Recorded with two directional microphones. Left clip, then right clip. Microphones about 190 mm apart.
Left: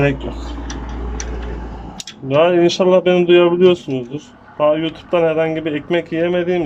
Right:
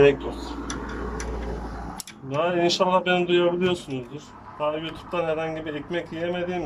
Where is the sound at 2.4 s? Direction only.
40° left (ahead or behind).